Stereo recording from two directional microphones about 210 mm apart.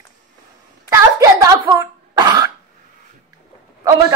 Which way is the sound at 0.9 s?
15° right (ahead or behind).